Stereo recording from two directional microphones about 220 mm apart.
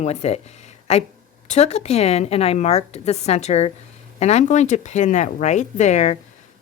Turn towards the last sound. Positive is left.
turn(degrees=30)  # may be behind; listen again after turning